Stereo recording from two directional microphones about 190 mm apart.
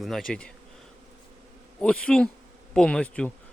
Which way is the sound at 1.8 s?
5° left (ahead or behind).